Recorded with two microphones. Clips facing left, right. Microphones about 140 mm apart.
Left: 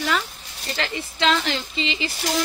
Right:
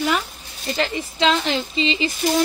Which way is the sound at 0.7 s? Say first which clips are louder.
Right 4 dB; 15° right (ahead or behind).